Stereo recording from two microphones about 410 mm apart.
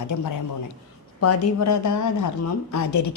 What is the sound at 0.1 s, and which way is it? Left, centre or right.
Speech, left.